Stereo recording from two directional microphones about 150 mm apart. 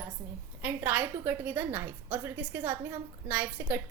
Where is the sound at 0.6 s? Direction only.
10° right (ahead or behind).